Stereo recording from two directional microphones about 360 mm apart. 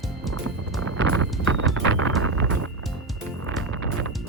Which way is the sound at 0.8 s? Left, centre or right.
Right.